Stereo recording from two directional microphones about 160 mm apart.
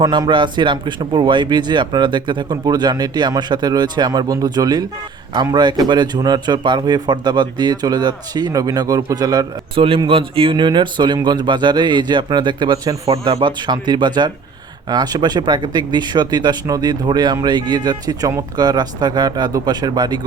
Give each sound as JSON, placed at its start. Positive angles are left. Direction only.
{"t": 0.0, "sound": "a man's voice", "side_deg": -25}